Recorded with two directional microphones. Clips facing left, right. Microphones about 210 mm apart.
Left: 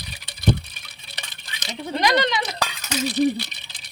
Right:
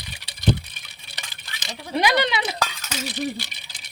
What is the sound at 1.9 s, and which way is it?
Speech, 10° right (ahead or behind).